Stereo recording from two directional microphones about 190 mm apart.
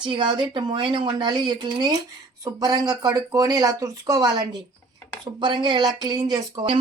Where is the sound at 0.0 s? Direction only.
25° right (ahead or behind).